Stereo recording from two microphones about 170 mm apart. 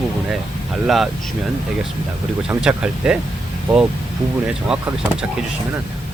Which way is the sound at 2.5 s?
5° right (ahead or behind).